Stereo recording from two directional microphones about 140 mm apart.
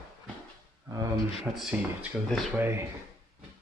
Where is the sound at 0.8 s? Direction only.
25° right (ahead or behind).